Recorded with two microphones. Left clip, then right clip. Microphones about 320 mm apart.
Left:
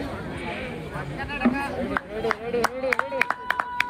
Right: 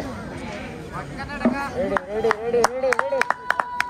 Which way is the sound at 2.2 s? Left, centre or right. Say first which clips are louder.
Right 5 dB; right.